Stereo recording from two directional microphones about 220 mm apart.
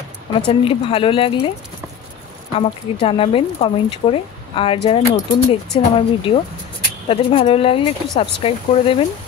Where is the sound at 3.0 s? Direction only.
25° left (ahead or behind).